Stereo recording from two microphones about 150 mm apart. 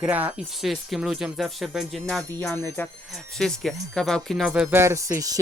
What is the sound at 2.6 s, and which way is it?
Speech, 15° left (ahead or behind).